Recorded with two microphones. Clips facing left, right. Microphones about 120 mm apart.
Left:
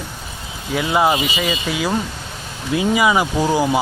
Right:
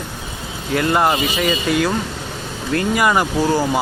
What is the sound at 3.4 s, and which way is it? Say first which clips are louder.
Speech: even; 10° left (ahead or behind).